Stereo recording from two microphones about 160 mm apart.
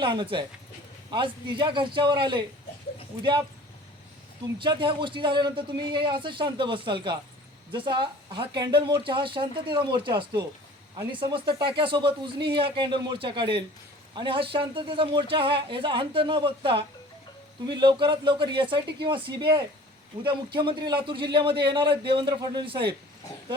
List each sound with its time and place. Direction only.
0.0 s a man's voice: 30° right (ahead or behind)
4.6 s a man's voice: 30° right (ahead or behind)